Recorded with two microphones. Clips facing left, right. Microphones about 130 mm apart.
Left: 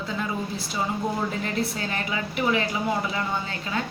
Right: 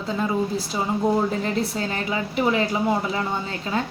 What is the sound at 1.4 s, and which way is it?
A woman's voice, 30° right (ahead or behind).